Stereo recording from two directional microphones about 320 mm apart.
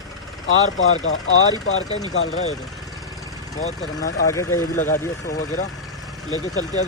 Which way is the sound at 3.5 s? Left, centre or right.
Centre.